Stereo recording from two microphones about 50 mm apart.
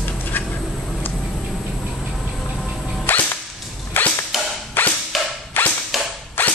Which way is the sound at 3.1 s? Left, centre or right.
Left.